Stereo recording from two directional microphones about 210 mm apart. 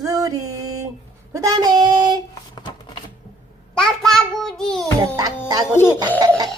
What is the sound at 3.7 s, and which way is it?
Child singing, 5° left (ahead or behind).